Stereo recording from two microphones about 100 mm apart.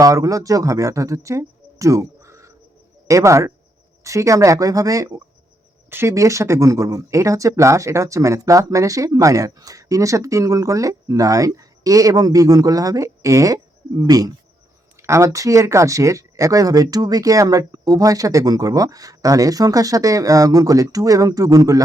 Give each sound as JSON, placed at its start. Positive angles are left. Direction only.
{"t": 0.0, "sound": "speech", "side_deg": -35}
{"t": 15.0, "sound": "speech", "side_deg": -30}